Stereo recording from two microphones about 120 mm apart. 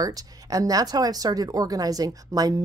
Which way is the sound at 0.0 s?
30° right (ahead or behind).